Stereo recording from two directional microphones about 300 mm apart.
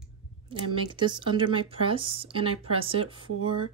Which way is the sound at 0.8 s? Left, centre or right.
Centre.